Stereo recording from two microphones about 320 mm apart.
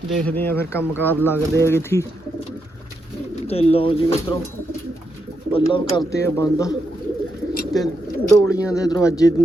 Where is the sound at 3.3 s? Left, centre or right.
Centre.